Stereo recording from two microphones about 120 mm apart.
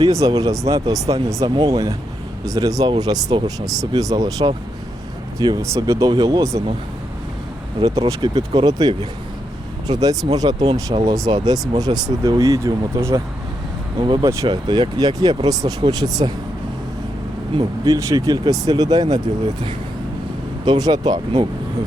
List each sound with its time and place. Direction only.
0.0 s speech: 30° right (ahead or behind)
5.6 s speech: 25° right (ahead or behind)
7.8 s speech: 30° right (ahead or behind)
14.0 s speech: 40° right (ahead or behind)
17.8 s speech: 25° right (ahead or behind)